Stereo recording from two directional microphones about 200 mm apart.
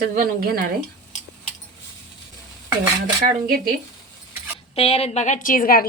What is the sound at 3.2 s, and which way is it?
Speech, 50° right (ahead or behind).